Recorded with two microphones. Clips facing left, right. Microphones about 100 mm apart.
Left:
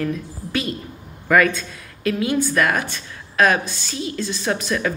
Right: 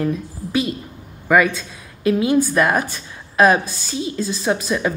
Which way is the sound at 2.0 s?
20° right (ahead or behind).